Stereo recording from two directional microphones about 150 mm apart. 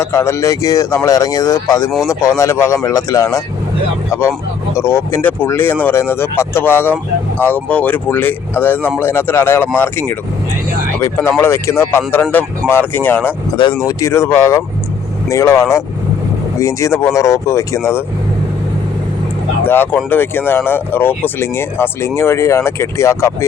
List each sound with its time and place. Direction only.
0.0 s speech: 20° left (ahead or behind)
19.6 s speech: 15° left (ahead or behind)